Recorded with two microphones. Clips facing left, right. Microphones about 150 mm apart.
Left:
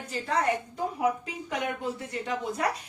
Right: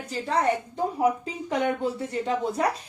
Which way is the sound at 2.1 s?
30° right (ahead or behind).